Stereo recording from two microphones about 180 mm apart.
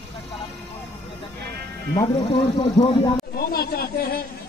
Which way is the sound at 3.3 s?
60° left (ahead or behind).